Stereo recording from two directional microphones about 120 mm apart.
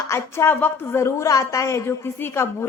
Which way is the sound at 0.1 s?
20° left (ahead or behind).